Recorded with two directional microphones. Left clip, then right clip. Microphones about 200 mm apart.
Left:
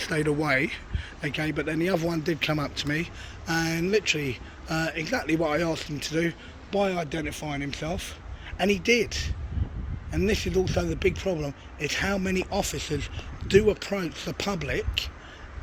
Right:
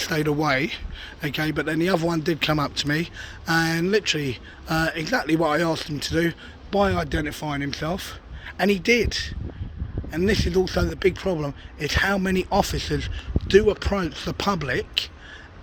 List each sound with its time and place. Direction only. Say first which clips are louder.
0.0 s speech: right 3 dB; 15° right (ahead or behind)